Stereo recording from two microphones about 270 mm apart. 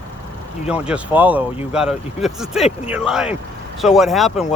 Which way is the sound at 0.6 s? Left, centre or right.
Centre.